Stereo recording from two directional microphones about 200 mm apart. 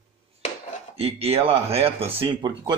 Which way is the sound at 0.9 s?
30° right (ahead or behind).